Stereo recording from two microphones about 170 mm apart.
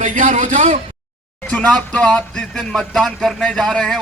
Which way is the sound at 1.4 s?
5° left (ahead or behind).